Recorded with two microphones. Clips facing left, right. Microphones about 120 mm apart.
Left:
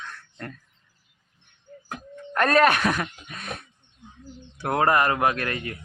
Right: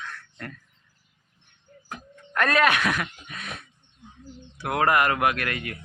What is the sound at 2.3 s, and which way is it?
Speech, 35° left (ahead or behind).